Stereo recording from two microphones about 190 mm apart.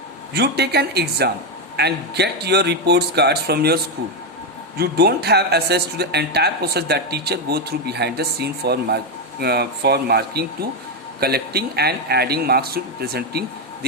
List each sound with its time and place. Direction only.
0.3 s speech: 60° right (ahead or behind)
4.8 s speech: 55° right (ahead or behind)